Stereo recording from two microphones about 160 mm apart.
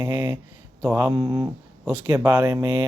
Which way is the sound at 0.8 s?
15° right (ahead or behind).